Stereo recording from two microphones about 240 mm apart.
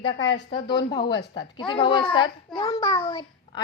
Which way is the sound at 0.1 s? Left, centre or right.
Left.